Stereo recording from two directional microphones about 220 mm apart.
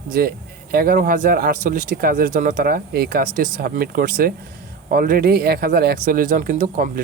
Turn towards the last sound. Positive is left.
turn(degrees=-40)  # may be behind; listen again after turning